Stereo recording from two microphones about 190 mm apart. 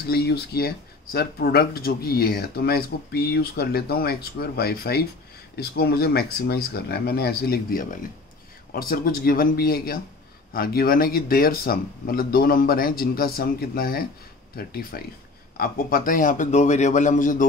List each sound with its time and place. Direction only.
0.0 s speech: 55° left (ahead or behind)